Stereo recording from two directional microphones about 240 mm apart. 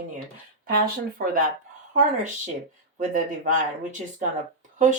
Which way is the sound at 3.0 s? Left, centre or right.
Right.